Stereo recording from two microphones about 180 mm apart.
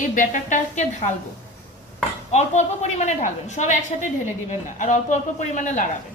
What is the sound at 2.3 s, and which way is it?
A woman's voice, 40° left (ahead or behind).